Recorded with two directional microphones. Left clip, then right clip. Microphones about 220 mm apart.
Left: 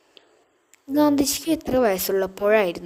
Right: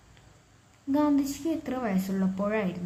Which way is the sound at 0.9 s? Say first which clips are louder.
Left 7 dB; 45° left (ahead or behind).